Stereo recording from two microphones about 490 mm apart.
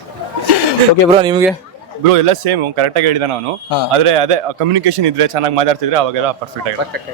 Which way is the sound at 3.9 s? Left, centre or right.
Right.